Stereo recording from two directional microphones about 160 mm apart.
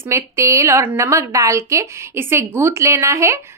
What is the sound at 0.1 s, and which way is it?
A woman's voice, 20° right (ahead or behind).